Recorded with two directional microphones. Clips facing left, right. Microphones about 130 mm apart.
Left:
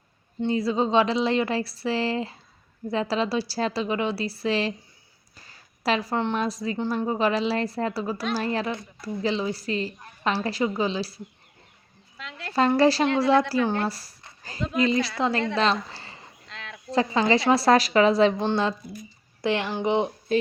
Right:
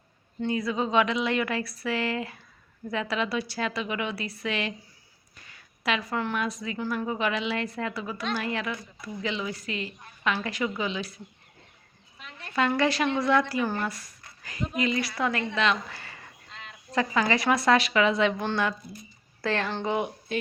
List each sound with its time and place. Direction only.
0.4 s a woman's voice: 30° left (ahead or behind)
12.1 s speech: 90° left
12.5 s a woman's voice: 35° left (ahead or behind)
13.8 s a sound: 35° left (ahead or behind)
14.8 s a woman's voice: 30° left (ahead or behind)
15.5 s a sound: 35° left (ahead or behind)
16.5 s a sound: 90° left
16.9 s a woman's voice: 30° left (ahead or behind)
20.3 s speech: 40° left (ahead or behind)